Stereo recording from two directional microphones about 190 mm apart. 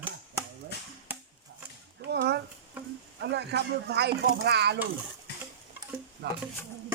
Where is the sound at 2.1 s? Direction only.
60° right (ahead or behind).